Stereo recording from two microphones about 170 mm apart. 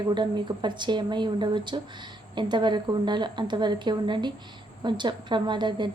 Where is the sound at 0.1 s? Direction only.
25° right (ahead or behind).